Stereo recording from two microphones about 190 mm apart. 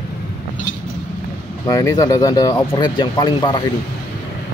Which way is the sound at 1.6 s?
20° left (ahead or behind).